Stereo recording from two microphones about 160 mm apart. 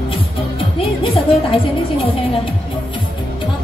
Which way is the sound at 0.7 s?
35° left (ahead or behind).